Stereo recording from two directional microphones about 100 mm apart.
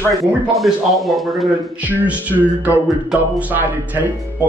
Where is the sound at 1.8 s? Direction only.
15° right (ahead or behind).